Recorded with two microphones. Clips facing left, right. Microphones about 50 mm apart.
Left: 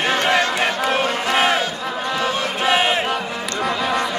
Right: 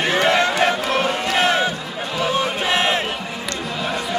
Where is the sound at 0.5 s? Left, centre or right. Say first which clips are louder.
Right 1 dB; centre.